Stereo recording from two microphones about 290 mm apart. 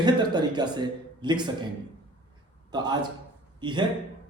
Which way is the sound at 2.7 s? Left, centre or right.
Centre.